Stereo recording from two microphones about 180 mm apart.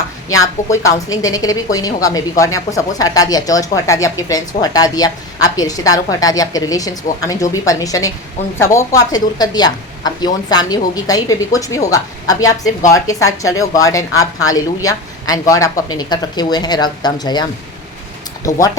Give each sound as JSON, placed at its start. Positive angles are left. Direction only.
{"t": 0.3, "sound": "a woman's voice", "side_deg": 20}